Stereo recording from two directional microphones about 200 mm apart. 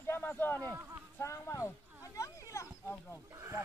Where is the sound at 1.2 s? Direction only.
15° left (ahead or behind).